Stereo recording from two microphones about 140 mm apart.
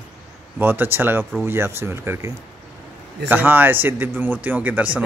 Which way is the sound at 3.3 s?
15° right (ahead or behind).